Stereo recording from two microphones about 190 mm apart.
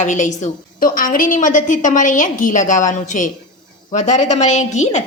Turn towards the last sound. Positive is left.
turn(degrees=40)  # may be behind; listen again after turning